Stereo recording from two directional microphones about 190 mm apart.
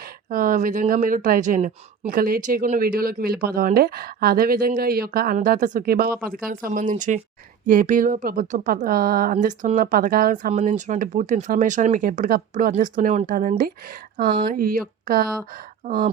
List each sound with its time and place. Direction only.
0.3 s speech: 45° right (ahead or behind)